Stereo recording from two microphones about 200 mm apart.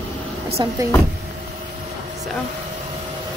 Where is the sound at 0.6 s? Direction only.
20° right (ahead or behind).